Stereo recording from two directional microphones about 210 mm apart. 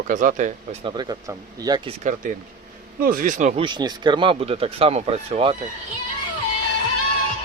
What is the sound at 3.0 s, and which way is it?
Speech, 40° right (ahead or behind).